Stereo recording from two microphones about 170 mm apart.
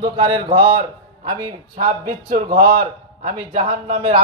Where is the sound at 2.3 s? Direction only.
55° right (ahead or behind).